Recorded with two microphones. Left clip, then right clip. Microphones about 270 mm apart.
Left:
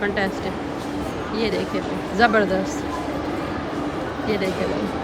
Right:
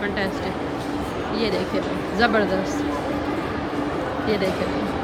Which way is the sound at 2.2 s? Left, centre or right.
Centre.